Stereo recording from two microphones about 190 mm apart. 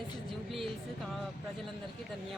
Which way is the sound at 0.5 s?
Centre (ahead or behind).